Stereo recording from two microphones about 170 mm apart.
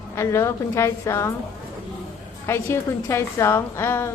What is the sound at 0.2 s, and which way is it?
A woman's voice, 15° left (ahead or behind).